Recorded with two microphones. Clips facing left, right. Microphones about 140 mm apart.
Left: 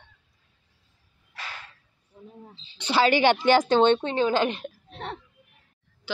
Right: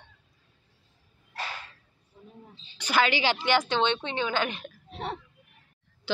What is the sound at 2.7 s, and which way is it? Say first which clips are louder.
Speech: left 3 dB; 25° left (ahead or behind).